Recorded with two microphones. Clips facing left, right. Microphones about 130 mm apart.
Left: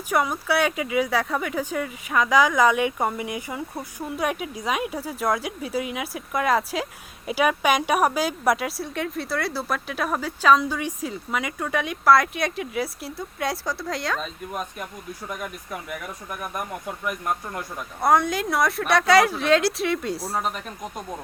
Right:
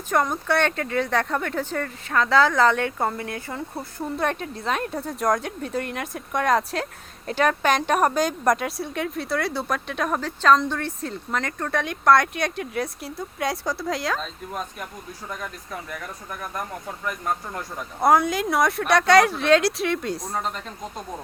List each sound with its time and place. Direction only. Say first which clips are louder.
0.1 s speech: right 1 dB; 5° left (ahead or behind)